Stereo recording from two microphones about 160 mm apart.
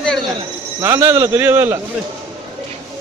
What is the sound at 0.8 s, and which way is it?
Speech, 15° right (ahead or behind).